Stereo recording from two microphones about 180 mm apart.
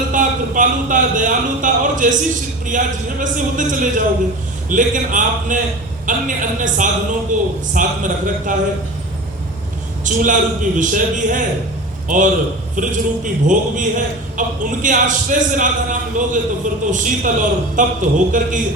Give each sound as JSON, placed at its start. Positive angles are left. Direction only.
{"t": 0.1, "sound": "a man's voice", "side_deg": -45}
{"t": 10.0, "sound": "a man's voice", "side_deg": -45}